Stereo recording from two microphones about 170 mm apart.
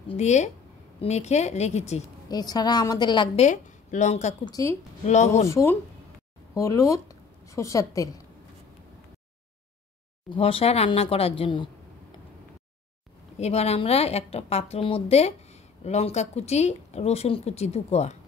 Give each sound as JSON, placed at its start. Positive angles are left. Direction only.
{"t": 0.2, "sound": "speech", "side_deg": 45}
{"t": 2.2, "sound": "a woman's voice", "side_deg": 25}
{"t": 3.3, "sound": "a woman's voice", "side_deg": 45}
{"t": 4.5, "sound": "a woman's voice", "side_deg": 20}
{"t": 5.0, "sound": "speech", "side_deg": 40}
{"t": 5.4, "sound": "a woman's voice", "side_deg": 15}
{"t": 10.3, "sound": "speech", "side_deg": 35}
{"t": 13.4, "sound": "speech", "side_deg": 40}